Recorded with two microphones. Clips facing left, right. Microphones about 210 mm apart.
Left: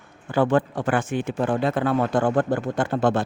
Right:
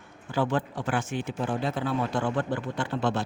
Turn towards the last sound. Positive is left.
turn(degrees=50)  # may be behind; listen again after turning